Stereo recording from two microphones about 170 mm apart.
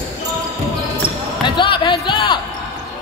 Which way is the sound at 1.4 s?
30° left (ahead or behind).